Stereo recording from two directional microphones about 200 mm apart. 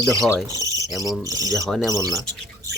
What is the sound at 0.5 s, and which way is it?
Cricket, 15° right (ahead or behind).